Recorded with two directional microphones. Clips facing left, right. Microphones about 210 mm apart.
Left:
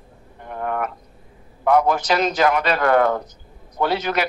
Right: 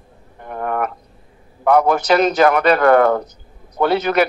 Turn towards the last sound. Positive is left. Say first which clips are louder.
# right 5 dB
turn(degrees=-60)  # may be behind; listen again after turning